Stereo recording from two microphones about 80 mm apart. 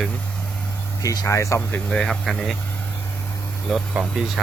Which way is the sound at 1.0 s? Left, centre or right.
Left.